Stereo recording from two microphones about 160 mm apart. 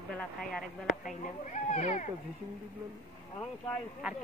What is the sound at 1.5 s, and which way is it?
Speech, 50° left (ahead or behind).